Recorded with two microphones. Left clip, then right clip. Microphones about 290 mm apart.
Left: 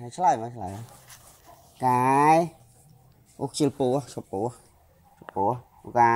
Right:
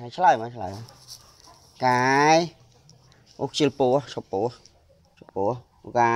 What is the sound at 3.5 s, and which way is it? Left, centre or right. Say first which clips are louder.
Speech: right 4 dB; right.